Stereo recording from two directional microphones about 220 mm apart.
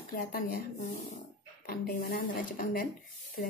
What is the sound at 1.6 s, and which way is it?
Speech, 40° left (ahead or behind).